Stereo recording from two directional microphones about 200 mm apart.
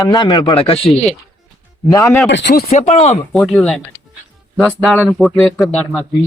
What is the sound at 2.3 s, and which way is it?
Speech, 60° left (ahead or behind).